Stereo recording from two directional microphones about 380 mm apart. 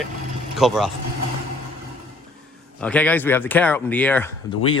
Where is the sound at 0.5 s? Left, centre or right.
Centre.